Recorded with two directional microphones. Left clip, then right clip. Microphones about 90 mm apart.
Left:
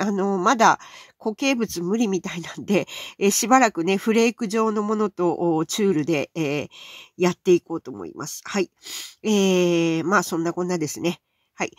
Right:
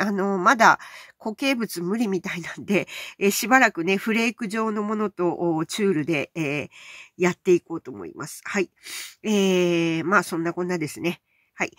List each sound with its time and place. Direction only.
0.0 s speech: 25° left (ahead or behind)